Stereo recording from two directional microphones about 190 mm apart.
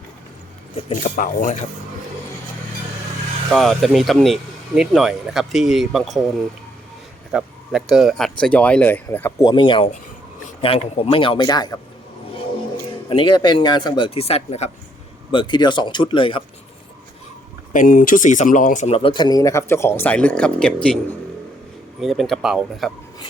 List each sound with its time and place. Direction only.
0.9 s speech: 40° left (ahead or behind)
3.5 s speech: centre (ahead or behind)
7.3 s speech: centre (ahead or behind)
9.5 s speech: 25° left (ahead or behind)
13.1 s speech: 25° left (ahead or behind)
17.7 s speech: 45° left (ahead or behind)
18.9 s speech: 30° left (ahead or behind); by 20.7 s 5° left (ahead or behind)
22.0 s speech: centre (ahead or behind)